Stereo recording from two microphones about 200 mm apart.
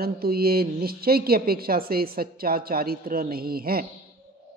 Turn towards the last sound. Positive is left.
turn(degrees=-50)  # may be behind; listen again after turning